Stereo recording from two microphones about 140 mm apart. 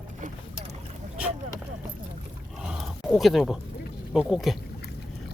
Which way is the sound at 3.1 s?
Centre (ahead or behind).